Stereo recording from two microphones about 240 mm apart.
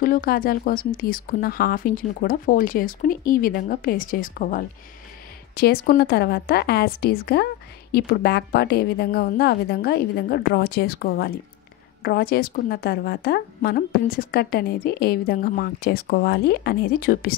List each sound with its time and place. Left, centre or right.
0.0 s a woman's voice: left